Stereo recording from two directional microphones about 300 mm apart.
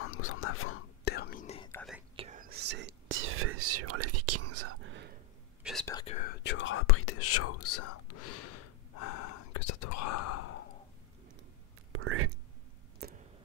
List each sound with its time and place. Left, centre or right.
0.0 s whispering: left
1.7 s whispering: centre
2.1 s whispering: right
5.6 s whispering: centre
5.9 s whispering: centre
6.1 s whispering: left
11.9 s whispering: right
13.0 s a sound: right